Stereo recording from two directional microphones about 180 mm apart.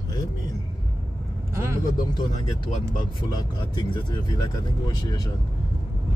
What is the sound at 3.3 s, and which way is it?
Speech, 25° left (ahead or behind).